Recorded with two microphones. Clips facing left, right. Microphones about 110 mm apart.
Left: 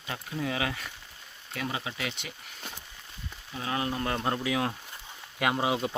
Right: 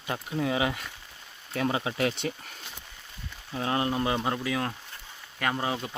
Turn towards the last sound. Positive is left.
turn(degrees=15)  # may be behind; listen again after turning